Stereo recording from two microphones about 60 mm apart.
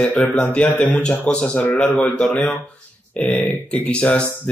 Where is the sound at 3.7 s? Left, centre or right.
Centre.